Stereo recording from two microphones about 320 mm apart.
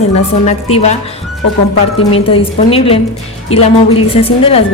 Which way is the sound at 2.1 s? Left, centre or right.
Centre.